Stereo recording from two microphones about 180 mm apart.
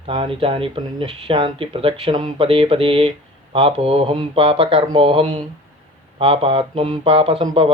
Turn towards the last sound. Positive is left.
turn(degrees=-30)  # may be behind; listen again after turning